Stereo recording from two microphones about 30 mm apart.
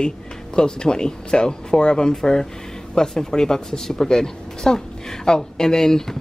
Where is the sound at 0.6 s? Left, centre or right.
Left.